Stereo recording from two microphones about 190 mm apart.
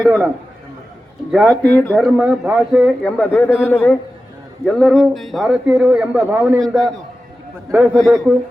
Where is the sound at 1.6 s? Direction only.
10° left (ahead or behind).